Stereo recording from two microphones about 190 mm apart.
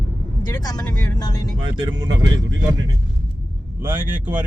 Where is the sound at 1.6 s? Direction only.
25° right (ahead or behind).